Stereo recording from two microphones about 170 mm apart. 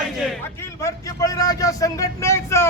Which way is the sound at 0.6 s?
15° left (ahead or behind).